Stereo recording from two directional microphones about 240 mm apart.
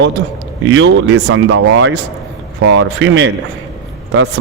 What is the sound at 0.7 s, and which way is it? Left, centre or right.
Speech, right.